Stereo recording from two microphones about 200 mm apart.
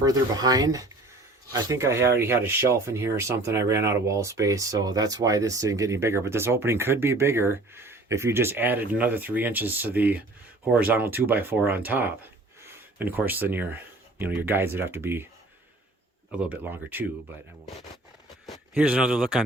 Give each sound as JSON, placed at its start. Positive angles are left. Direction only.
{"t": 0.0, "sound": "speech", "side_deg": -20}
{"t": 16.3, "sound": "speech", "side_deg": -5}
{"t": 18.7, "sound": "speech", "side_deg": -5}